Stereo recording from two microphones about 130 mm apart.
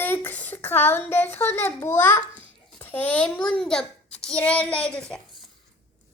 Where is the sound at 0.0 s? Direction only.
15° left (ahead or behind).